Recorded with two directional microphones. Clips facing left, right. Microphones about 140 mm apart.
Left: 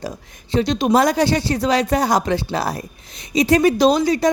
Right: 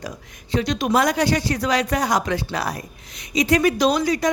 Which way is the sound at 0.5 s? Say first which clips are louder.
Left 4 dB; 25° left (ahead or behind).